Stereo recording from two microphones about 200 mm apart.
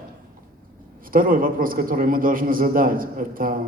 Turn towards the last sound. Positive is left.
turn(degrees=-45)  # may be behind; listen again after turning